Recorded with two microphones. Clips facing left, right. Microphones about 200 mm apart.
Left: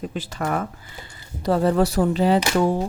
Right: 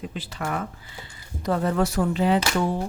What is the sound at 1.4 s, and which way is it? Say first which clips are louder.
Speech: left 4 dB; 30° left (ahead or behind).